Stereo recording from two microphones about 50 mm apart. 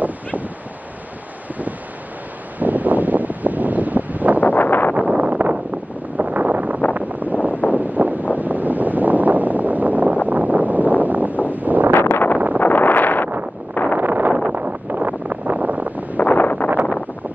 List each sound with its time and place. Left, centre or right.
2.6 s wind noise: right
4.4 s wind: left
4.9 s a sound: right
6.1 s wind noise: right
7.7 s a sound: right
8.4 s wind noise: right
11.9 s a sound: left
13.9 s wind noise: right
16.2 s wind noise: left